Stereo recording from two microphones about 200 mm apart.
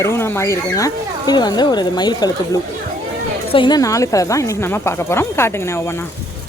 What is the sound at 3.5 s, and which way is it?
Speech, 20° left (ahead or behind).